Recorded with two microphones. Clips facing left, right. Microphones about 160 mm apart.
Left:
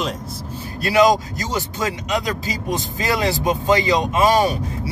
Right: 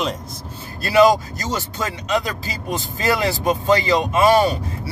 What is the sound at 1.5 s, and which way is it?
Speech, 15° left (ahead or behind).